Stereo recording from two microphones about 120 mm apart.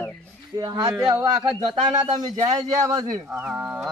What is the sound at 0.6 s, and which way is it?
Speech, 30° right (ahead or behind).